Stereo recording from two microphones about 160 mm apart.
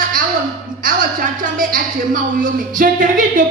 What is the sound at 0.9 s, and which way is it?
A woman's voice, 60° right (ahead or behind).